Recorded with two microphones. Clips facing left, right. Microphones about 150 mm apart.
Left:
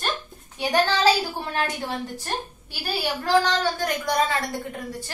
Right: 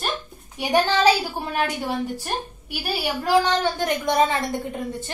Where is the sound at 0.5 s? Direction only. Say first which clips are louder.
Right 2 dB; 15° right (ahead or behind).